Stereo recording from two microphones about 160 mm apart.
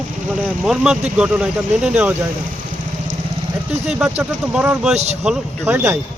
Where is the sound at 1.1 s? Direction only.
5° right (ahead or behind).